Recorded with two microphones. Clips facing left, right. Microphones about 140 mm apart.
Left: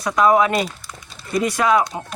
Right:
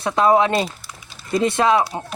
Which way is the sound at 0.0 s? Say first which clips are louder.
Even; 25° right (ahead or behind).